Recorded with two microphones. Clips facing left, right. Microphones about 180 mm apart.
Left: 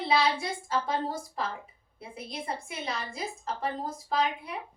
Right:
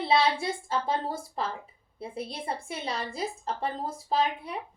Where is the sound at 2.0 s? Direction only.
30° right (ahead or behind).